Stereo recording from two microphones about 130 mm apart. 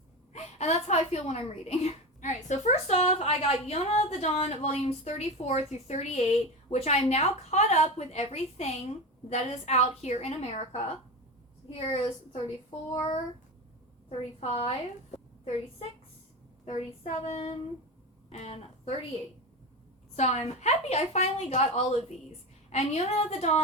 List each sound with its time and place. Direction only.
0.3 s a woman's voice: 60° left (ahead or behind)
12.9 s child singing: 35° left (ahead or behind)
14.2 s speech: 50° left (ahead or behind)
16.6 s speech: 55° left (ahead or behind)
20.1 s a woman's voice: 60° left (ahead or behind)